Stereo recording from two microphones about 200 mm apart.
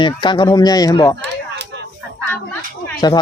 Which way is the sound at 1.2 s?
60° right (ahead or behind).